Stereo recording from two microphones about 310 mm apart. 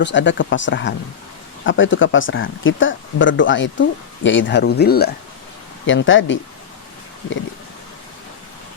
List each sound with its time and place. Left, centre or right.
0.0 s speech: left